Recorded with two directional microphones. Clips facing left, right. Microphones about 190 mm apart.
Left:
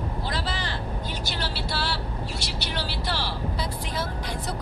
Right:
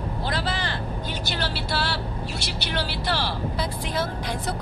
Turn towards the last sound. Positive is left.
turn(degrees=-60)  # may be behind; listen again after turning